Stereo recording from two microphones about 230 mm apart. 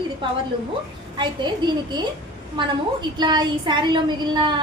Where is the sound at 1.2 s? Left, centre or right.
Centre.